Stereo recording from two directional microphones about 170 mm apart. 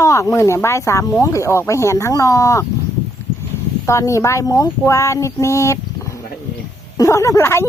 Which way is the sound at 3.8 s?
20° left (ahead or behind).